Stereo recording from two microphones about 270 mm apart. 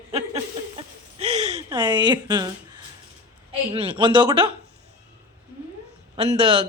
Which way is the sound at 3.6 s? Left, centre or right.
Centre.